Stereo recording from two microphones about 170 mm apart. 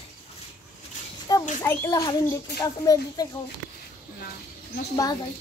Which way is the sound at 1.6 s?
15° left (ahead or behind).